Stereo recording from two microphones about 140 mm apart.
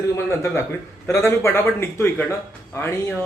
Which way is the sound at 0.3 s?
20° left (ahead or behind).